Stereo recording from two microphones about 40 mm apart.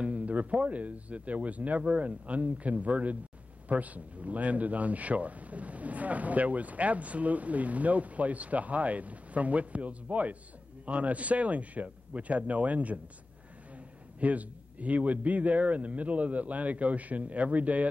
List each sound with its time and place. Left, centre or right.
0.0 s speech: right
14.2 s speech: right